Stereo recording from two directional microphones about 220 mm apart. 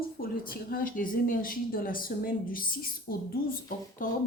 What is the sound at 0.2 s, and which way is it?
A woman's voice, 40° left (ahead or behind).